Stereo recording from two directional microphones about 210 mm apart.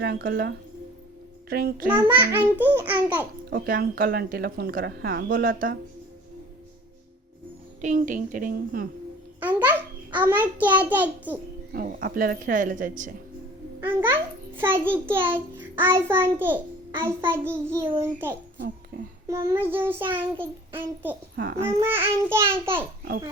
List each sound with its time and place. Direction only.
0.0 s speech: 45° right (ahead or behind)
1.9 s child singing: 10° right (ahead or behind)
3.5 s speech: 45° right (ahead or behind)
7.8 s a woman's voice: 35° right (ahead or behind)
9.4 s a child's voice: 10° right (ahead or behind)
11.7 s a woman's voice: 45° right (ahead or behind)
13.8 s a child's voice: 10° right (ahead or behind)
17.0 s child singing: 10° right (ahead or behind)
21.3 s a child's voice: 45° right (ahead or behind)
21.6 s child singing: 10° right (ahead or behind)